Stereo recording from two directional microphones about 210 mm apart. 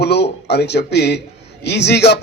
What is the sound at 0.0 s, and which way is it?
A man's voice, 50° left (ahead or behind).